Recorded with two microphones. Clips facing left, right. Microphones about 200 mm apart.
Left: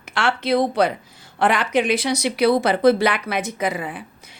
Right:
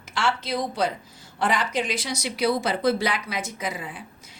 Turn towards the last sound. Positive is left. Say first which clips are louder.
# left 7 dB
turn(degrees=60)  # may be behind; listen again after turning